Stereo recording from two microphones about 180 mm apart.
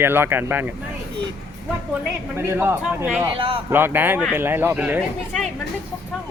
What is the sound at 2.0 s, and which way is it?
Speech, 10° right (ahead or behind).